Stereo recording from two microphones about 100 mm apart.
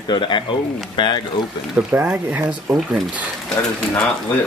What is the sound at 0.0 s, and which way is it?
Speech, 55° left (ahead or behind).